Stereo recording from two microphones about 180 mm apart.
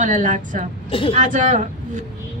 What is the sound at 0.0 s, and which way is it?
A woman's voice, 45° right (ahead or behind).